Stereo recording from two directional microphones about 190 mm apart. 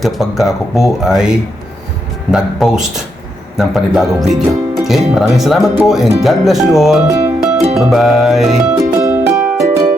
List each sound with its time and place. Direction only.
0.0 s speech: centre (ahead or behind)
7.1 s music: 15° right (ahead or behind)
7.8 s speech: centre (ahead or behind)
9.0 s music: 15° right (ahead or behind)